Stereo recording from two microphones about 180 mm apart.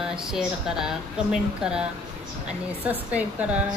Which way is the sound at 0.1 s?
5° right (ahead or behind).